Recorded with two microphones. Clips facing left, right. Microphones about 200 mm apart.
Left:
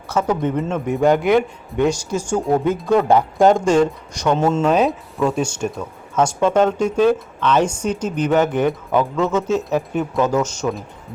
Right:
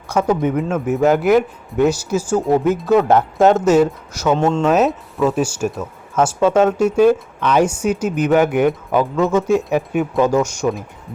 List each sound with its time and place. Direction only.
0.1 s speech: 10° right (ahead or behind)